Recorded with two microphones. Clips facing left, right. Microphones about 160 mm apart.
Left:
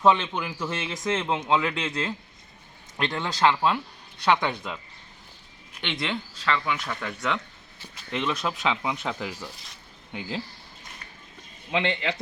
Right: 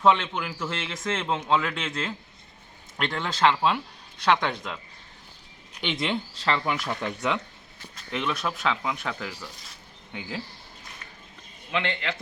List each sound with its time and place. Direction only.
0.0 s a man's voice: 10° left (ahead or behind)
5.8 s speech: 10° right (ahead or behind)
6.4 s speech: 35° right (ahead or behind)
7.2 s a man's voice: 15° right (ahead or behind); by 9.5 s 10° left (ahead or behind)
9.6 s a sound: 5° left (ahead or behind)
11.7 s a man's voice: 25° left (ahead or behind)